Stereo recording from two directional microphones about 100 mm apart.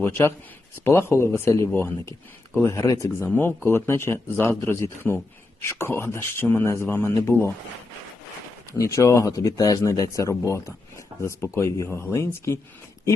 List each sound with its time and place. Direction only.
0.0 s a man's voice: 20° left (ahead or behind)
3.2 s a man's voice: 20° left (ahead or behind)
8.8 s speech: 30° left (ahead or behind)